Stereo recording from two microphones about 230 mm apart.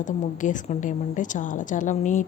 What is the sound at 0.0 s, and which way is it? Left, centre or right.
A woman's voice, left.